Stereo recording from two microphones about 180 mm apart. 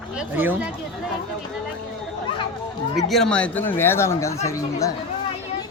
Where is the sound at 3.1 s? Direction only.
5° left (ahead or behind).